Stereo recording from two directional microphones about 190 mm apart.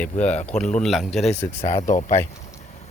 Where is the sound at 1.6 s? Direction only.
35° left (ahead or behind).